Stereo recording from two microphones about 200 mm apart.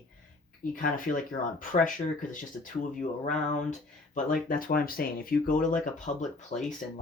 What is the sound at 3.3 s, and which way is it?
Speech, 40° left (ahead or behind).